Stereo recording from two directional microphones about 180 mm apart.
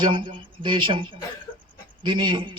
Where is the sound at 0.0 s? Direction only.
25° right (ahead or behind).